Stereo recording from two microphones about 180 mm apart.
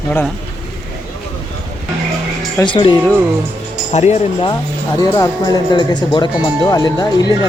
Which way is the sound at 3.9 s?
40° left (ahead or behind).